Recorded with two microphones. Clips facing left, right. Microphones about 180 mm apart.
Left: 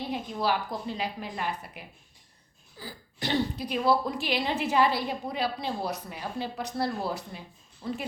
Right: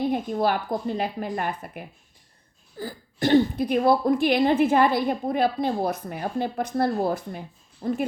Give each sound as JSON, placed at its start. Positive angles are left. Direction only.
{"t": 0.0, "sound": "speech", "side_deg": -50}